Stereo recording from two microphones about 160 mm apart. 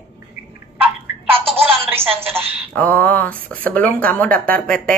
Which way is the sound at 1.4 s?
35° right (ahead or behind).